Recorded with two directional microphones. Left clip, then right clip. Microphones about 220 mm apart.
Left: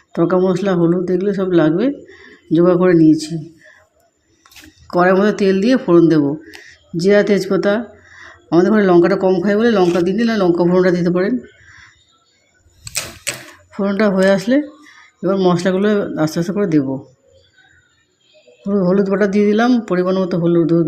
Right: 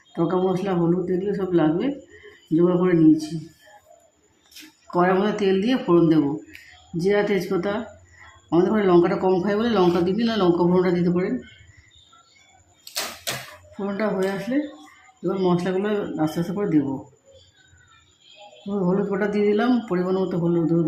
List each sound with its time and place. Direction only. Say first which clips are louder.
0.1 s speech: left 7 dB; 20° left (ahead or behind)
4.9 s speech: left 7 dB; 15° left (ahead or behind)
13.7 s speech: left 9 dB; 20° left (ahead or behind)
18.7 s speech: left 8 dB; 20° left (ahead or behind)